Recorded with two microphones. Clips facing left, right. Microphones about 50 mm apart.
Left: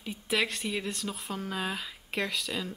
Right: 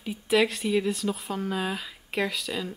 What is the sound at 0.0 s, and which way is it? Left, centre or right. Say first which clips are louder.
Speech: right 6 dB; centre.